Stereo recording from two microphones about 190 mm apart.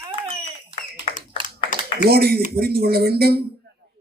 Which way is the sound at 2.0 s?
55° right (ahead or behind).